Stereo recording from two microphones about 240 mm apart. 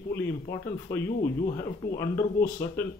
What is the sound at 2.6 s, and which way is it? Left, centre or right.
Speech, centre.